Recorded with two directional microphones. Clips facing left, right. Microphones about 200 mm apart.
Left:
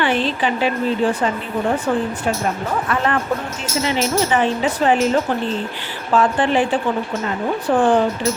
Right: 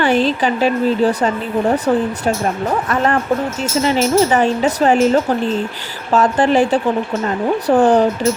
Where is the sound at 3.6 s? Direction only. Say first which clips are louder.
Right 4 dB; 40° right (ahead or behind).